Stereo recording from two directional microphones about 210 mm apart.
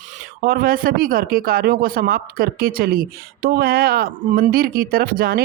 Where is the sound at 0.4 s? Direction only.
45° right (ahead or behind).